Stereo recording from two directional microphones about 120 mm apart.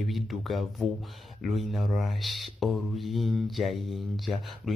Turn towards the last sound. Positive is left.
turn(degrees=0)  # may be behind; listen again after turning